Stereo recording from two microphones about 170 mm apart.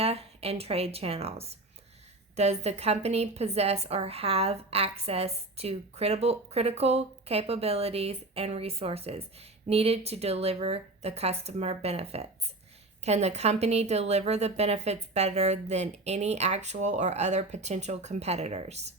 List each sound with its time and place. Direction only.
0.0 s a woman's voice: 35° right (ahead or behind)